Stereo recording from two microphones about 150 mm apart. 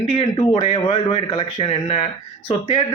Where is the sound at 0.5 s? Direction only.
40° left (ahead or behind).